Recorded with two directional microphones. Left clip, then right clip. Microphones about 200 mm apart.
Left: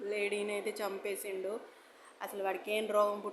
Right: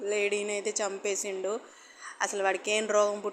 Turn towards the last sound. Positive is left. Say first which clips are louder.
# right 5 dB
turn(degrees=-15)  # may be behind; listen again after turning